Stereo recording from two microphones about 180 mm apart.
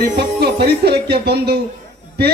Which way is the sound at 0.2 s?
65° right (ahead or behind).